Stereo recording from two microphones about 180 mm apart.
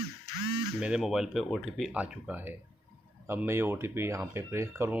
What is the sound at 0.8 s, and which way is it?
Speech, 5° right (ahead or behind).